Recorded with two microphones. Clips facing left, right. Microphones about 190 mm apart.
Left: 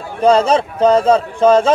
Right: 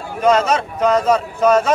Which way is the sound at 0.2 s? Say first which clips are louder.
Left 3 dB; 30° left (ahead or behind).